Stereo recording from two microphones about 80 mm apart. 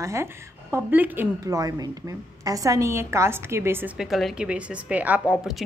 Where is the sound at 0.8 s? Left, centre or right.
Right.